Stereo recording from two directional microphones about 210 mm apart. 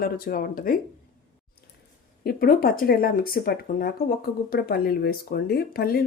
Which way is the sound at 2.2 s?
45° left (ahead or behind).